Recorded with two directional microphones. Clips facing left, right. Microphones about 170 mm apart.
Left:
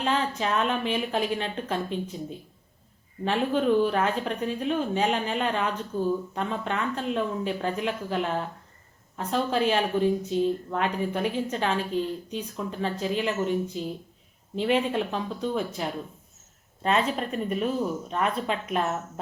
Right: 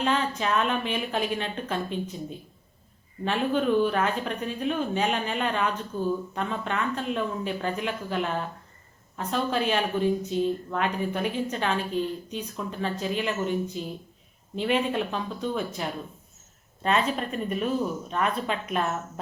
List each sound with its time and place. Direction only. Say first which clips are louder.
0.0 s speech: even; 30° left (ahead or behind)
3.2 s speech: left 1 dB; 30° left (ahead or behind)